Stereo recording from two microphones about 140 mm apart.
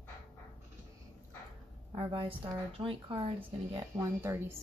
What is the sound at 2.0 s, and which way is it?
Speech, 40° right (ahead or behind).